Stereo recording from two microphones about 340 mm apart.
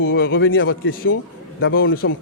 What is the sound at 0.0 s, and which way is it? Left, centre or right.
A man's voice, left.